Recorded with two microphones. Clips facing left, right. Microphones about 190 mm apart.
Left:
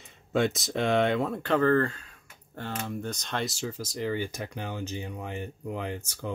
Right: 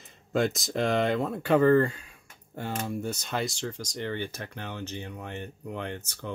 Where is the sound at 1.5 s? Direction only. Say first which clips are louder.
Right 3 dB; 15° right (ahead or behind); by 6.3 s 5° left (ahead or behind).